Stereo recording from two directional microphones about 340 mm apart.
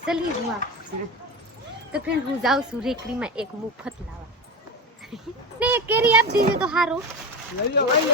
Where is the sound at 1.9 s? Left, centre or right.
Centre.